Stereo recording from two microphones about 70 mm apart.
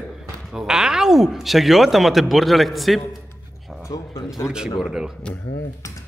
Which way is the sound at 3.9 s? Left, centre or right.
Left.